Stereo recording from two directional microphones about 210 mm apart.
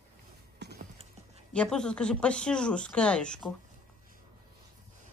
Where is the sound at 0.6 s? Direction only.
55° right (ahead or behind).